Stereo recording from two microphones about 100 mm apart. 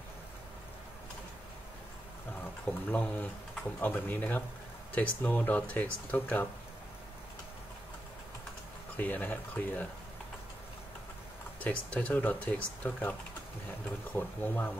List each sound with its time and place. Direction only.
2.6 s speech: 15° left (ahead or behind)
8.9 s speech: 15° left (ahead or behind)
11.6 s speech: 15° left (ahead or behind)
14.1 s speech: 20° left (ahead or behind)